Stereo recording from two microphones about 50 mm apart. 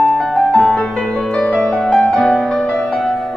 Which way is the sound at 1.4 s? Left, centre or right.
Centre.